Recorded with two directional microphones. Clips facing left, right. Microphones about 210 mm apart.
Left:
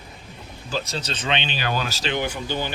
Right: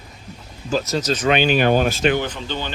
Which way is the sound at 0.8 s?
30° left (ahead or behind).